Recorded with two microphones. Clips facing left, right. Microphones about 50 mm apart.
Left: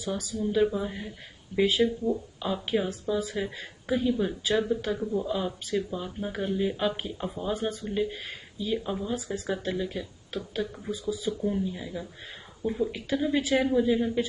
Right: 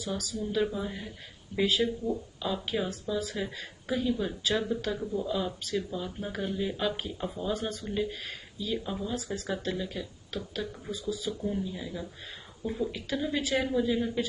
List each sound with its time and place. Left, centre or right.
0.0 s a woman's voice: centre